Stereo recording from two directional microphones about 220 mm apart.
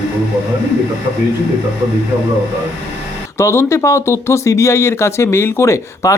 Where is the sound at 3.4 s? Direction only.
10° left (ahead or behind).